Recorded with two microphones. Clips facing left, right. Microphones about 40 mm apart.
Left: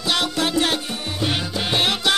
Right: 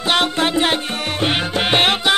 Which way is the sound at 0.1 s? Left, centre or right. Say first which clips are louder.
Right 4 dB; right.